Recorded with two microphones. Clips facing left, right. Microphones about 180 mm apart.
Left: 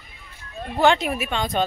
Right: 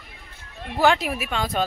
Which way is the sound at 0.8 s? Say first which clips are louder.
Left 1 dB; 5° right (ahead or behind).